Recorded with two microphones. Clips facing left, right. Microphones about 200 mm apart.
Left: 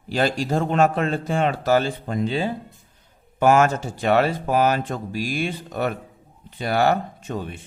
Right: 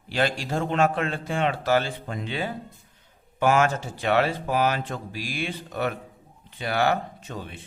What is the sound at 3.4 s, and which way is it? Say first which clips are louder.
A man's voice: left 4 dB; 45° left (ahead or behind).